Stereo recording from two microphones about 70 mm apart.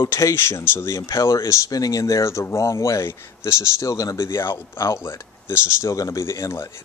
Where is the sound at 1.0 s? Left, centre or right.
Left.